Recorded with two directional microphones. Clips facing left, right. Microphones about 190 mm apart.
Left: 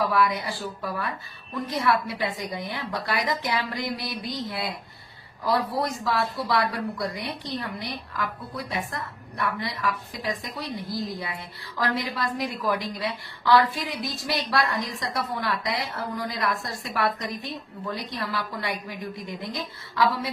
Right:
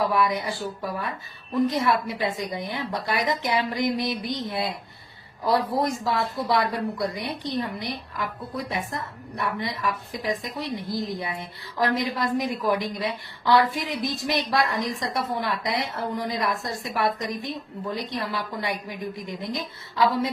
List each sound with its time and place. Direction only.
0.0 s a woman's voice: 20° right (ahead or behind)
1.5 s a woman's voice: 20° right (ahead or behind)